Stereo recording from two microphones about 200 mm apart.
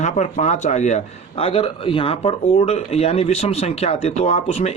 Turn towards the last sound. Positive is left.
turn(degrees=35)  # may be behind; listen again after turning